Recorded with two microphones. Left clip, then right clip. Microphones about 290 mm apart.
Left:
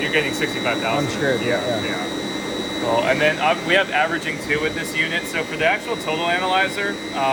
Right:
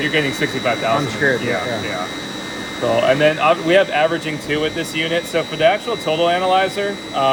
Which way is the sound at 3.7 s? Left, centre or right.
Right.